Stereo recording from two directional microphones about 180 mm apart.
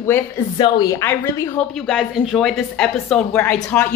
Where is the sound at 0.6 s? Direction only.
20° left (ahead or behind).